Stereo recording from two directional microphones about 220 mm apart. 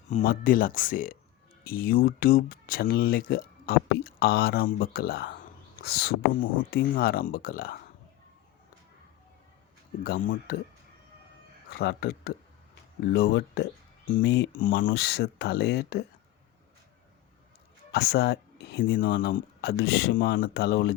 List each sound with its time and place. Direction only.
0.1 s speech: 35° left (ahead or behind)
10.0 s speech: 40° left (ahead or behind)
11.7 s speech: 45° left (ahead or behind)
17.9 s speech: 45° left (ahead or behind)